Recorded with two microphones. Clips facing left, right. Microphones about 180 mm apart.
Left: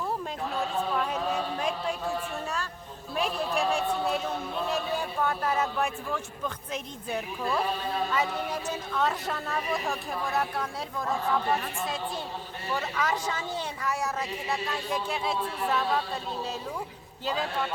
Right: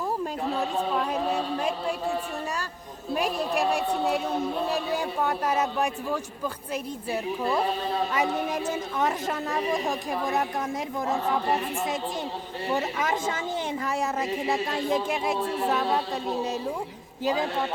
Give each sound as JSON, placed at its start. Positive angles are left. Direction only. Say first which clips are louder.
{"t": 5.2, "sound": "speech", "louder": "right 1 dB", "side_deg": -15}
{"t": 8.1, "sound": "speech", "louder": "right 3 dB", "side_deg": -20}
{"t": 12.6, "sound": "speech", "louder": "right 3 dB", "side_deg": -20}
{"t": 15.0, "sound": "speech", "louder": "right 4 dB", "side_deg": -15}
{"t": 17.2, "sound": "speech", "louder": "right 4 dB", "side_deg": -15}